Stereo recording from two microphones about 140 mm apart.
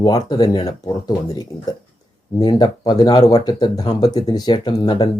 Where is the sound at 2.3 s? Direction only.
30° left (ahead or behind).